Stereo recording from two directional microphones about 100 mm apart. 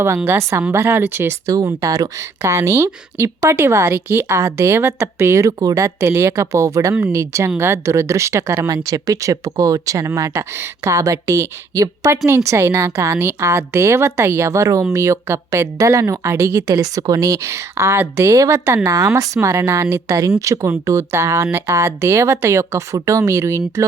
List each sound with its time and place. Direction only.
0.3 s speech: 25° right (ahead or behind)
1.5 s speech: 35° right (ahead or behind)